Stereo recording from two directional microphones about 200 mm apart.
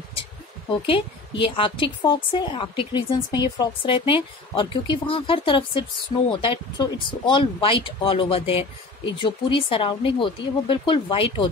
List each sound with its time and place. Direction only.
0.7 s speech: 25° left (ahead or behind)